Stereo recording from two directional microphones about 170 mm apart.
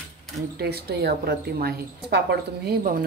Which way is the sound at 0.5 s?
70° right (ahead or behind).